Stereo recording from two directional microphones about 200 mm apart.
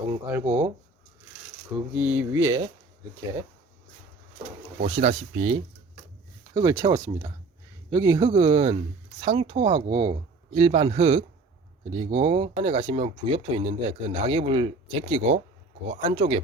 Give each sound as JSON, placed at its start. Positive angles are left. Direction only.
{"t": 0.1, "sound": "speech", "side_deg": -10}
{"t": 1.7, "sound": "speech", "side_deg": -5}
{"t": 4.8, "sound": "speech", "side_deg": -30}